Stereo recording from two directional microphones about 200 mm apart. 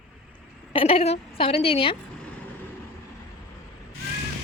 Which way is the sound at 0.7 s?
30° left (ahead or behind).